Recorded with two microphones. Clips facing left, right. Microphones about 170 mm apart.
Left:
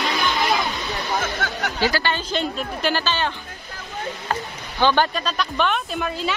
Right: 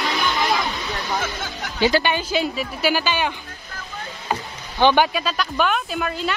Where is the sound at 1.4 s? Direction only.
70° left (ahead or behind).